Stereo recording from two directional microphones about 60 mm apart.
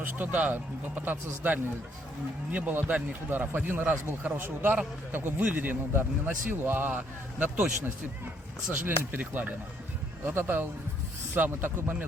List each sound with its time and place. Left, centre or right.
0.0 s a man's voice: right
9.1 s a man's voice: right